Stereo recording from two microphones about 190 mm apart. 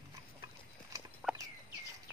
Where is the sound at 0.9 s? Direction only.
15° right (ahead or behind).